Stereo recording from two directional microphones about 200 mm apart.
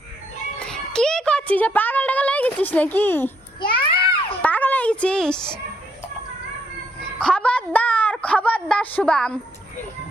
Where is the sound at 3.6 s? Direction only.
25° left (ahead or behind).